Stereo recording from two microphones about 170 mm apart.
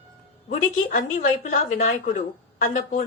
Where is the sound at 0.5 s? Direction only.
55° left (ahead or behind).